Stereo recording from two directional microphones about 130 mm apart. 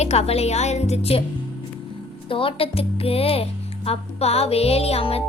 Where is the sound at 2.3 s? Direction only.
45° left (ahead or behind).